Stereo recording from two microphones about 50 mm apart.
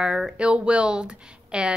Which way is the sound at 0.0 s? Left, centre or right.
Centre.